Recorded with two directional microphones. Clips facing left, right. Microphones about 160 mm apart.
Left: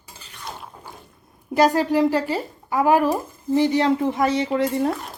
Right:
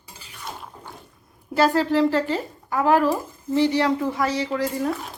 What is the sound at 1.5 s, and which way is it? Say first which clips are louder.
Speech: left 1 dB; 15° left (ahead or behind).